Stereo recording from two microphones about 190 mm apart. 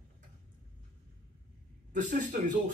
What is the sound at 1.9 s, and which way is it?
Speech, 40° right (ahead or behind).